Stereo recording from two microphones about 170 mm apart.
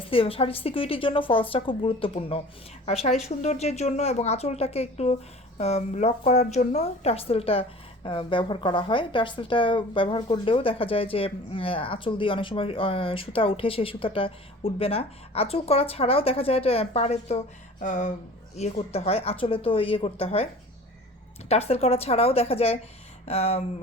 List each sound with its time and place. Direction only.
0.1 s a woman's voice: 35° left (ahead or behind)
21.5 s a woman's voice: 40° left (ahead or behind)